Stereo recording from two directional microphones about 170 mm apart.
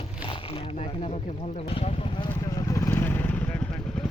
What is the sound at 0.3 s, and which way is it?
Speech, 30° left (ahead or behind).